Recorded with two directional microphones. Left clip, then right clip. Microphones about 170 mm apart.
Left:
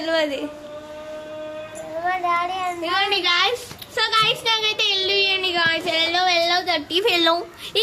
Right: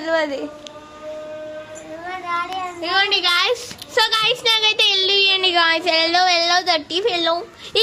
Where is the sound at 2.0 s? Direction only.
70° left (ahead or behind).